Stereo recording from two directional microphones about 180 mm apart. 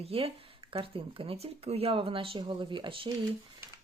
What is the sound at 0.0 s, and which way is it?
Speech, 30° right (ahead or behind).